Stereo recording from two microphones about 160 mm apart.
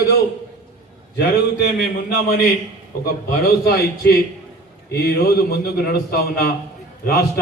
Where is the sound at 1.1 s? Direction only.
90° left.